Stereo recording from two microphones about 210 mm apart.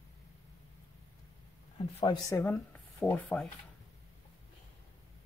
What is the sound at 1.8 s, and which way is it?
Speech, 20° left (ahead or behind).